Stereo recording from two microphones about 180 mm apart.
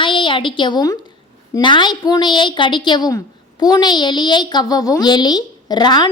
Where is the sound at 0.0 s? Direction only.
25° left (ahead or behind).